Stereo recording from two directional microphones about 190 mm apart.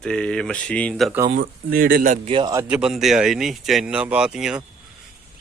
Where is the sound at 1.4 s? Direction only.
50° right (ahead or behind).